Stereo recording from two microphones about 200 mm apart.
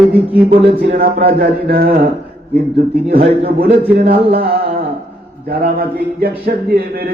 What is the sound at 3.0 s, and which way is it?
Speech, 50° right (ahead or behind).